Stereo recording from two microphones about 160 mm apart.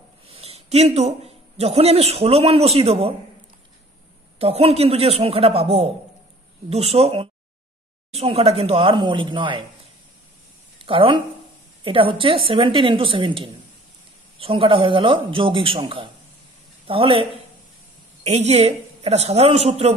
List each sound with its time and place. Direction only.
0.3 s speech: 40° right (ahead or behind)
4.4 s a woman's voice: 40° right (ahead or behind)
10.9 s a woman's voice: 35° right (ahead or behind)
16.8 s a woman's voice: 35° right (ahead or behind)